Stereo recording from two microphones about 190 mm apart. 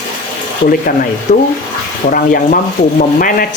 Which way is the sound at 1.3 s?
40° left (ahead or behind).